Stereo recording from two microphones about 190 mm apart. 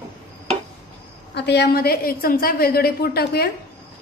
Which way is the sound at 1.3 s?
60° left (ahead or behind).